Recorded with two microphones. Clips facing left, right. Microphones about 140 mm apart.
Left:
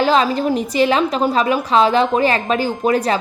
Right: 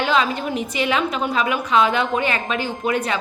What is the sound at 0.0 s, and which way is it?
A woman's voice, 35° left (ahead or behind).